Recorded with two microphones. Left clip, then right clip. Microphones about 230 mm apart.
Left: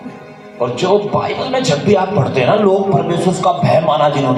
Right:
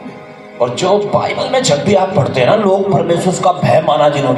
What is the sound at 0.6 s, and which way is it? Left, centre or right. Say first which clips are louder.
A man's voice: right 2 dB; right.